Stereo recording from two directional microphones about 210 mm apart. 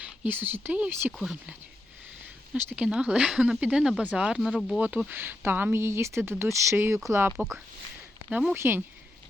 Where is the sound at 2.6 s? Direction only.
5° right (ahead or behind).